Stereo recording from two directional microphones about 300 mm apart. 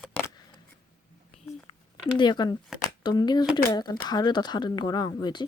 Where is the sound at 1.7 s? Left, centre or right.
Centre.